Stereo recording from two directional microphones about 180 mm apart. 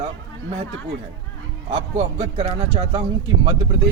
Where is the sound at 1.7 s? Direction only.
30° right (ahead or behind).